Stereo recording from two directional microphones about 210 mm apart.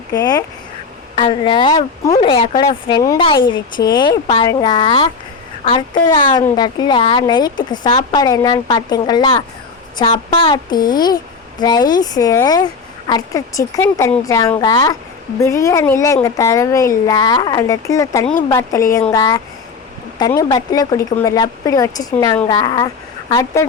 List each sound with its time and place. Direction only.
0.1 s a woman's voice: 15° left (ahead or behind)